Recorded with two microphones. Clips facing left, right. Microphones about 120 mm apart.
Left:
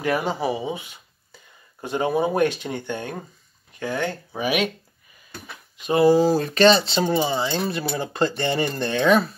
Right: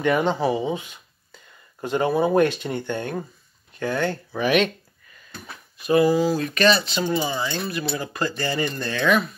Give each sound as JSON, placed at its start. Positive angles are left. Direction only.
{"t": 0.0, "sound": "speech", "side_deg": 5}
{"t": 5.8, "sound": "speech", "side_deg": 20}
{"t": 6.0, "sound": "speech", "side_deg": 35}